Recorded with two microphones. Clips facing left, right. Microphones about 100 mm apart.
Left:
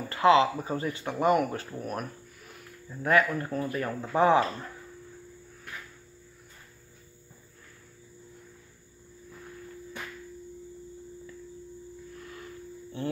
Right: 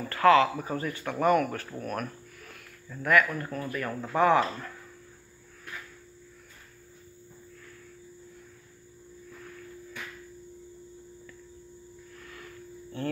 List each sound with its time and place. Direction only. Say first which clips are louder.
0.1 s speech: even; 20° left (ahead or behind)
2.4 s a sound: left 1 dB; 15° left (ahead or behind)
3.0 s speech: even; 30° left (ahead or behind)
3.9 s speech: left 1 dB; centre (ahead or behind)
4.2 s speech: even; 30° left (ahead or behind)
12.2 s a sound: even; 30° left (ahead or behind)